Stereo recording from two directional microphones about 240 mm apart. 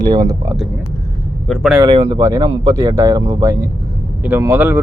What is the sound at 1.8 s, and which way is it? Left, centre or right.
Speech, centre.